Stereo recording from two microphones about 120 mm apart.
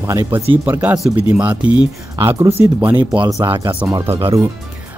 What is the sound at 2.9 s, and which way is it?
Speech, 40° right (ahead or behind).